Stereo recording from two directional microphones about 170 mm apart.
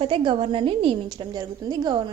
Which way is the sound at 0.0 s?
30° right (ahead or behind).